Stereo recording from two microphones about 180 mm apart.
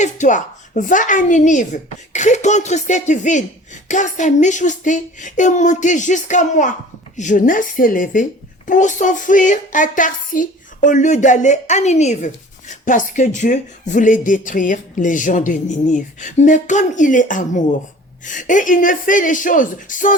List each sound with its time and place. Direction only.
0.0 s a woman's voice: 40° left (ahead or behind)